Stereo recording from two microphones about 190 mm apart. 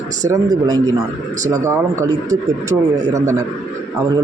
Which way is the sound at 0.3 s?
20° right (ahead or behind).